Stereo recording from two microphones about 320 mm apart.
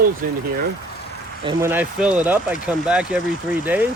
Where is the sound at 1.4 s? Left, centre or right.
Centre.